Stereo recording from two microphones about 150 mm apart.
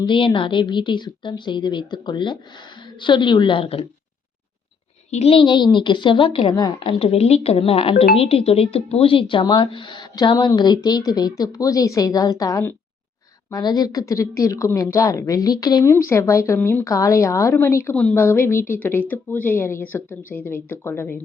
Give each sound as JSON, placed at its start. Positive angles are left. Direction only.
{"t": 0.0, "sound": "speech", "side_deg": 35}
{"t": 5.1, "sound": "speech", "side_deg": 40}
{"t": 16.6, "sound": "speech", "side_deg": 10}
{"t": 16.8, "sound": "speech", "side_deg": 20}